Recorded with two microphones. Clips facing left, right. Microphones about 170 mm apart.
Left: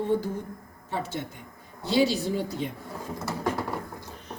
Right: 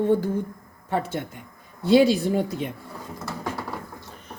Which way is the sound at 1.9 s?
55° right (ahead or behind).